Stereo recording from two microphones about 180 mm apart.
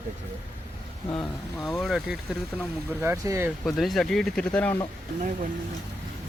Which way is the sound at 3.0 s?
15° right (ahead or behind).